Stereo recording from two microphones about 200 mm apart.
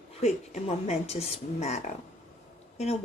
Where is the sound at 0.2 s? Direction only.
35° left (ahead or behind).